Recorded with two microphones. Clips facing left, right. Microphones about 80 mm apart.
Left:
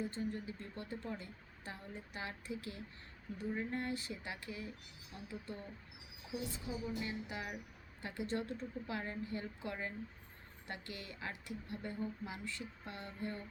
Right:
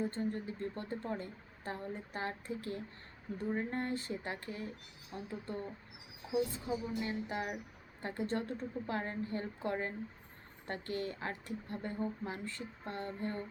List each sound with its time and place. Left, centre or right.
0.0 s speech: right
6.3 s speech: right